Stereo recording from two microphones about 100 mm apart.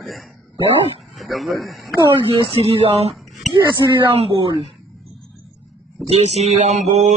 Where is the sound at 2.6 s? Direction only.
90° right.